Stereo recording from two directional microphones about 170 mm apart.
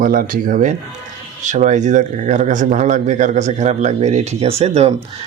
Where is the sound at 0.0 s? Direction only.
55° right (ahead or behind).